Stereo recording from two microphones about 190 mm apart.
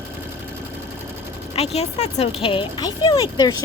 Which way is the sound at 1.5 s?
35° left (ahead or behind).